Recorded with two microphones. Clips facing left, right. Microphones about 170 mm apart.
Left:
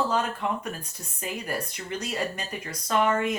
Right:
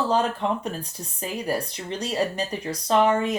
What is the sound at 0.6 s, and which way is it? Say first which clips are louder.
Speech: right 4 dB; 35° right (ahead or behind).